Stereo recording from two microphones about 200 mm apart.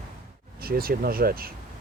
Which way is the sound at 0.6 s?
50° right (ahead or behind).